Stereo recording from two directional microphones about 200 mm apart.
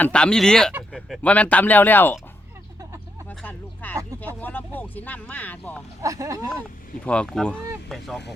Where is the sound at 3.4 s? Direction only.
10° left (ahead or behind).